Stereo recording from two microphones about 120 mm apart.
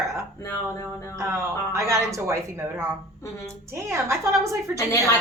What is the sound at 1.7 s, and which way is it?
Speech, 25° right (ahead or behind).